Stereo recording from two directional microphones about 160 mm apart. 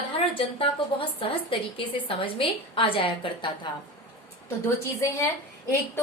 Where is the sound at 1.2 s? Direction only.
35° left (ahead or behind).